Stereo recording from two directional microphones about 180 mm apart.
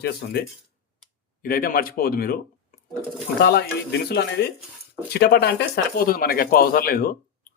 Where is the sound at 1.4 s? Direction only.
55° left (ahead or behind).